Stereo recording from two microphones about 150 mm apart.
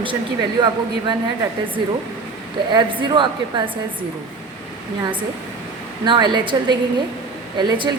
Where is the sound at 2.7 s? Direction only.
30° right (ahead or behind).